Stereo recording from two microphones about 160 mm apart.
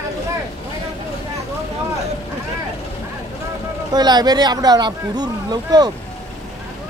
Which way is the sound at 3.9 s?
25° right (ahead or behind).